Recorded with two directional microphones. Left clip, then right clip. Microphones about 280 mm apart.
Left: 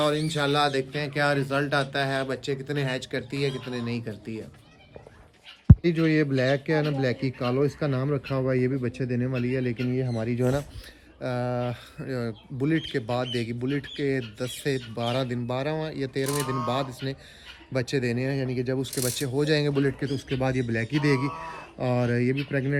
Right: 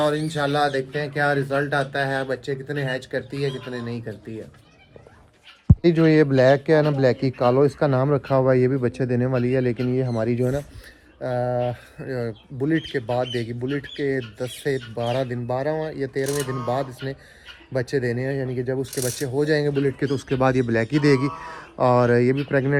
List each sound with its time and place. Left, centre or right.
0.0 s speech: centre
5.6 s speech: centre
11.2 s speech: centre
20.7 s speech: centre